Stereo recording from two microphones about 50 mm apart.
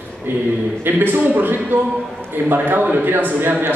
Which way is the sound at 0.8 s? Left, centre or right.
Right.